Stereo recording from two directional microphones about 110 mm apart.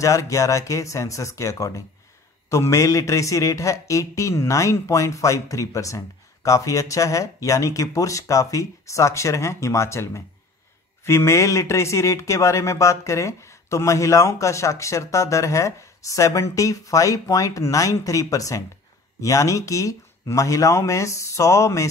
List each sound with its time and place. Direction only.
0.0 s a man's voice: 30° left (ahead or behind)